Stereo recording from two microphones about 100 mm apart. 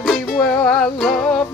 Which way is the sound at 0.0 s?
5° left (ahead or behind).